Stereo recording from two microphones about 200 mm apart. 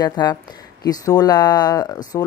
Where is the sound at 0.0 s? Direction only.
20° left (ahead or behind).